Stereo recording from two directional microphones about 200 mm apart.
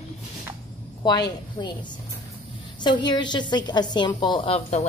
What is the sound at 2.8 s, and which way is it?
A woman's voice, 20° left (ahead or behind).